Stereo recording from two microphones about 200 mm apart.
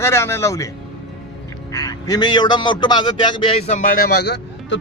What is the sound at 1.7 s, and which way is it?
A man's voice, 15° left (ahead or behind).